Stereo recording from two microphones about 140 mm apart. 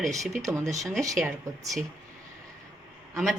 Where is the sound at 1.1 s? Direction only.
Centre (ahead or behind).